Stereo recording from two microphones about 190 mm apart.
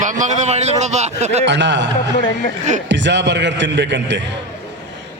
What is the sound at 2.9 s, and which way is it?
A man's voice, 70° right (ahead or behind).